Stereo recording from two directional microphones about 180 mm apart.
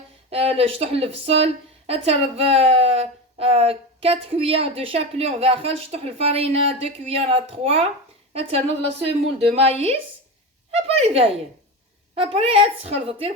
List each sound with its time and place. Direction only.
0.3 s a woman's voice: 35° right (ahead or behind)